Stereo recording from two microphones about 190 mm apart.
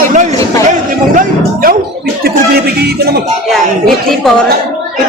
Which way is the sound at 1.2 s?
50° right (ahead or behind).